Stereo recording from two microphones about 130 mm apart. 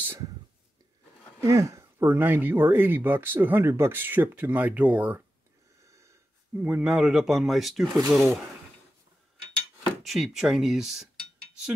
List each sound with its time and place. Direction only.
1.4 s speech: 25° right (ahead or behind)
5.9 s speech: 25° right (ahead or behind); by 8.4 s centre (ahead or behind)
10.0 s speech: centre (ahead or behind)